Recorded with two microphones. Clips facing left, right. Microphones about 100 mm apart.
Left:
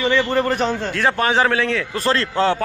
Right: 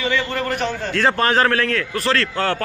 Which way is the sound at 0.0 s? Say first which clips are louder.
Left 4 dB; 30° left (ahead or behind).